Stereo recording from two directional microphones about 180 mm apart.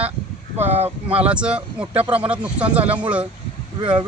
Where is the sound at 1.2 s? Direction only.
5° right (ahead or behind).